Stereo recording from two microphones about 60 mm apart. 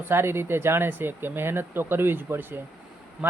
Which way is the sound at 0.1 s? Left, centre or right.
Right.